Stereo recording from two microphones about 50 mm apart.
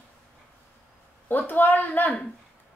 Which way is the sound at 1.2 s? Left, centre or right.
Left.